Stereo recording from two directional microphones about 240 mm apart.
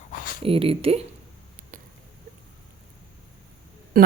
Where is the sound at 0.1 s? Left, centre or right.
Left.